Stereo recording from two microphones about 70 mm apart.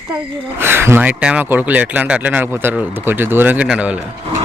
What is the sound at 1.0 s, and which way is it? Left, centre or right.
Speech, centre.